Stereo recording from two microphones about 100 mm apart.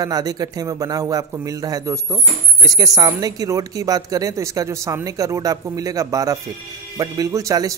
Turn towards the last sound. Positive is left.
turn(degrees=-35)  # may be behind; listen again after turning